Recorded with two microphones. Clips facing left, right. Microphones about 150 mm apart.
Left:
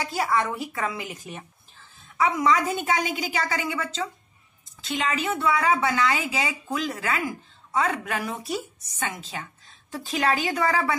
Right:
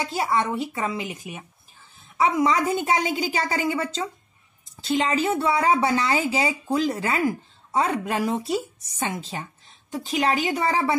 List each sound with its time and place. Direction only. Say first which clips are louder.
0.0 s a woman's voice: right 1 dB; 20° right (ahead or behind)
9.8 s speech: right 1 dB; 15° right (ahead or behind)